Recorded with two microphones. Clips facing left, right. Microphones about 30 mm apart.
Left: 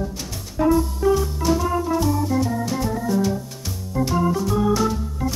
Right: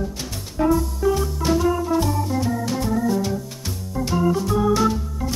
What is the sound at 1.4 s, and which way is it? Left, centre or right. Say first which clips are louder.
Organ: right 1 dB; centre.